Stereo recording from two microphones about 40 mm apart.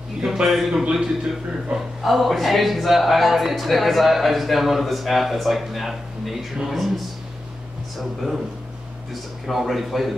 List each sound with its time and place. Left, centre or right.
0.2 s a man's voice: centre
1.7 s speech: centre
2.0 s speech: centre
8.0 s speech: centre